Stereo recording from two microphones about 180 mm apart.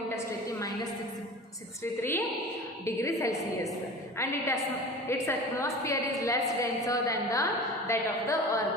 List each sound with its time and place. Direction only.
1.8 s a woman's voice: 15° left (ahead or behind)